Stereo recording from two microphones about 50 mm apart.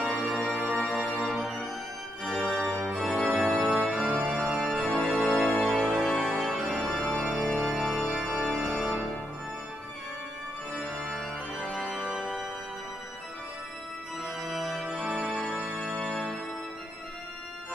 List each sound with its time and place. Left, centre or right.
0.0 s organ: centre
10.8 s organ: centre
11.5 s organ: centre
14.2 s organ: centre